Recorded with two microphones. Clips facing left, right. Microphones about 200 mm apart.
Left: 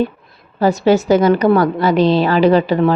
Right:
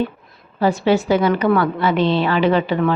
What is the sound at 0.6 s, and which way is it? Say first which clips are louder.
A woman's voice: left 3 dB; 40° left (ahead or behind).